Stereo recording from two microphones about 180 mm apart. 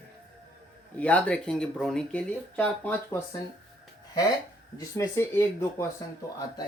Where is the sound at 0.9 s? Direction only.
10° left (ahead or behind).